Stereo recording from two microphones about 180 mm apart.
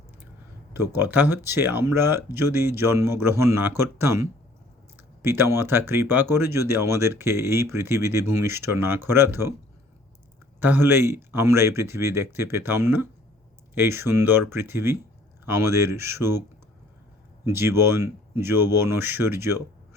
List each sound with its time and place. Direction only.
0.7 s speech: 15° right (ahead or behind)
10.6 s speech: 10° right (ahead or behind)
17.5 s speech: 15° right (ahead or behind)